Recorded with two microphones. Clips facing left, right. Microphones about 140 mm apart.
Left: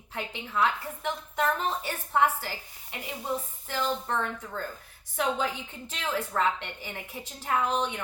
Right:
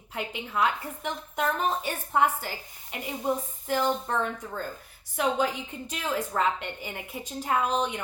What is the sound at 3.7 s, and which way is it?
Speech, 15° right (ahead or behind).